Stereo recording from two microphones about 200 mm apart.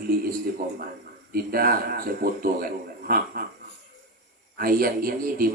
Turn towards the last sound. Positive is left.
turn(degrees=-45)  # may be behind; listen again after turning